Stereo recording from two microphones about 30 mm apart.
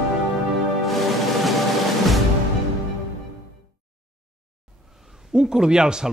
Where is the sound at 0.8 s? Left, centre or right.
Centre.